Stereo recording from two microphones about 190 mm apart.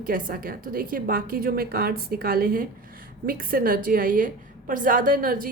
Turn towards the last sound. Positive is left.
turn(degrees=-50)  # may be behind; listen again after turning